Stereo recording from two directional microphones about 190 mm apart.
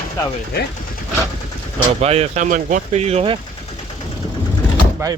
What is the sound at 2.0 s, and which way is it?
Speech, 35° right (ahead or behind).